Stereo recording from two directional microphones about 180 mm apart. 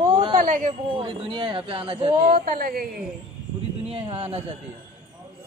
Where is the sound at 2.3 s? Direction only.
55° right (ahead or behind).